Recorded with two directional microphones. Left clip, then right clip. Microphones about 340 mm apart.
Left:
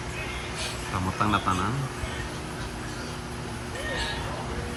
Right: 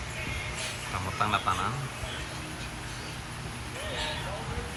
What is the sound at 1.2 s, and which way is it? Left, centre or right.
Speech, centre.